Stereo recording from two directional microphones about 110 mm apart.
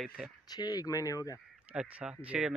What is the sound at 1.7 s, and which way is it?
Speech, 10° right (ahead or behind).